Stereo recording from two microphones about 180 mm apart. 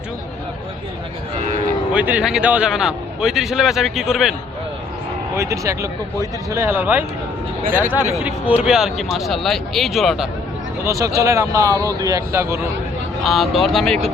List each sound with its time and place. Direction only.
1.9 s a man's voice: 10° right (ahead or behind)
5.4 s speech: 15° right (ahead or behind)
8.2 s a man's voice: 5° right (ahead or behind)
10.8 s speech: 20° right (ahead or behind)
13.2 s a man's voice: centre (ahead or behind)